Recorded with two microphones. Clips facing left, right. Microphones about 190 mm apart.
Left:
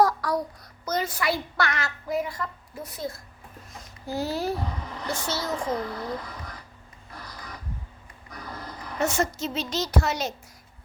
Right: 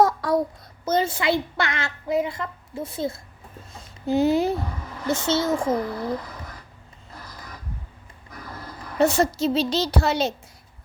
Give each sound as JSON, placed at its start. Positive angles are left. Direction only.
{"t": 0.0, "sound": "child singing", "side_deg": -25}
{"t": 0.9, "sound": "a child's voice", "side_deg": -25}
{"t": 9.0, "sound": "a woman's voice", "side_deg": -35}